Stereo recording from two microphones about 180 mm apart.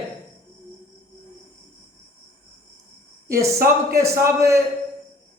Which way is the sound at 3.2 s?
15° right (ahead or behind).